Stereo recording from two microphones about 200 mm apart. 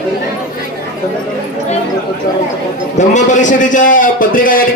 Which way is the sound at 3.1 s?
40° left (ahead or behind).